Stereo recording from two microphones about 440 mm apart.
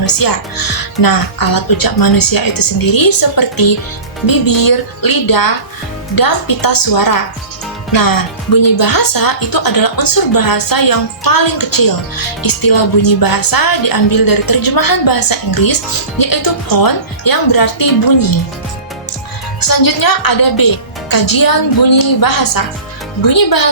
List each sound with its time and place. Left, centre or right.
0.0 s a woman's voice: left
19.5 s a woman's voice: left